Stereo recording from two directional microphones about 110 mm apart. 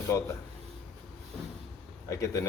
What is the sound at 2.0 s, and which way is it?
Speech, 30° left (ahead or behind).